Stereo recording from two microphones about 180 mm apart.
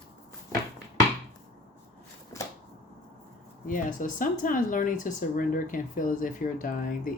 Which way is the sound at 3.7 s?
45° left (ahead or behind).